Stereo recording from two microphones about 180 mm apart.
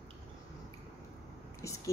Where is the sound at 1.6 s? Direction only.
15° left (ahead or behind).